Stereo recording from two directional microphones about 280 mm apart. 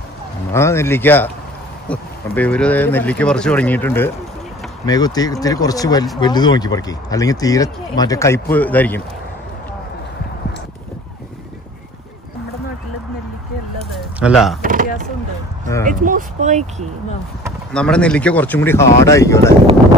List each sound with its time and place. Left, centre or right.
0.5 s speech: centre
14.2 s speech: centre
14.6 s a sound: right
15.8 s speech: right
17.5 s speech: centre